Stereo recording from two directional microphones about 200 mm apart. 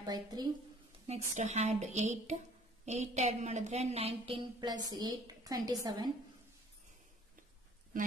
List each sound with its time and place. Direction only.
0.0 s speech: 20° right (ahead or behind)
1.0 s a woman's voice: 35° right (ahead or behind)